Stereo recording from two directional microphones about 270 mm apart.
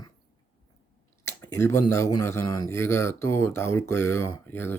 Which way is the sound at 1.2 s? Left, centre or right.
Centre.